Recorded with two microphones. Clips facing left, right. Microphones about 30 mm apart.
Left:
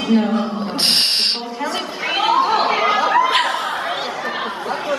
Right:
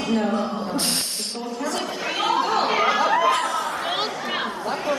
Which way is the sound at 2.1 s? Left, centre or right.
Left.